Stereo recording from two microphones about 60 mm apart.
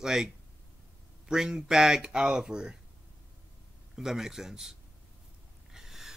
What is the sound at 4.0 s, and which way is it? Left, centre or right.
Speech, centre.